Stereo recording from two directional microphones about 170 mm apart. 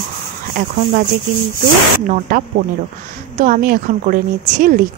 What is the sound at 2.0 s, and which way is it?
A woman's voice, 55° right (ahead or behind).